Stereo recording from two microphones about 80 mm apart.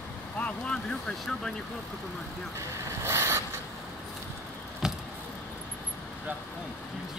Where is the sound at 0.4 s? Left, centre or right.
Centre.